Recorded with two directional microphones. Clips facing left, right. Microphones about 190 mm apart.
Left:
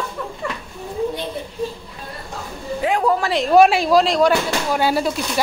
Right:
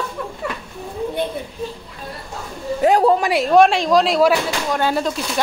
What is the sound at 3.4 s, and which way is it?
Speech, 5° left (ahead or behind).